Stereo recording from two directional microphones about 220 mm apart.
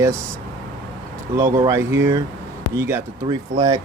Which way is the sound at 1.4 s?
15° right (ahead or behind).